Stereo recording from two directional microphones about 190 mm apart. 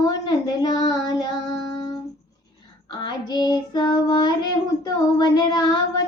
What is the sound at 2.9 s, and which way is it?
Child singing, 20° left (ahead or behind).